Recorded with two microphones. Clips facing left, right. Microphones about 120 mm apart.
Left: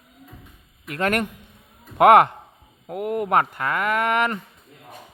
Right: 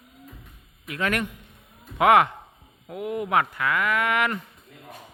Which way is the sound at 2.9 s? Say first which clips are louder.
Left 4 dB; 50° left (ahead or behind).